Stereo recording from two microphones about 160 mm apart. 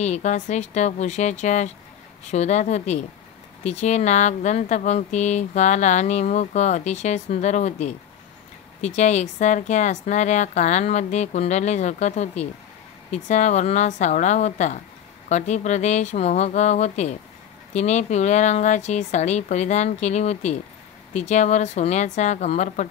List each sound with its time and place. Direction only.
0.0 s speech: 45° left (ahead or behind)